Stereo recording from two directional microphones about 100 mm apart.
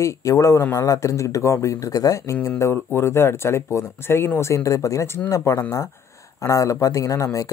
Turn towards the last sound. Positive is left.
turn(degrees=35)  # may be behind; listen again after turning